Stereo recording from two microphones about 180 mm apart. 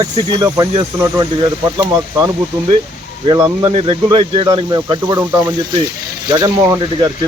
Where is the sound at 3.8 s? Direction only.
30° right (ahead or behind).